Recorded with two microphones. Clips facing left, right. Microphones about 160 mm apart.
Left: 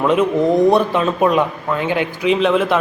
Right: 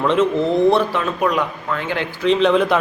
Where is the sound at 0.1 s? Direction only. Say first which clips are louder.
Left 2 dB; 15° left (ahead or behind).